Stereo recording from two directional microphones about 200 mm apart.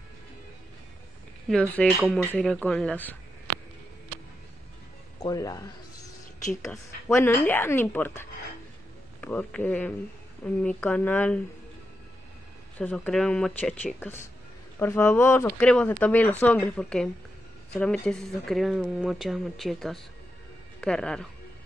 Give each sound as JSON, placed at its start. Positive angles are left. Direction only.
{"t": 1.5, "sound": "speech", "side_deg": 5}
{"t": 5.2, "sound": "a sound", "side_deg": 15}
{"t": 7.1, "sound": "speech", "side_deg": 10}
{"t": 12.7, "sound": "speech", "side_deg": 5}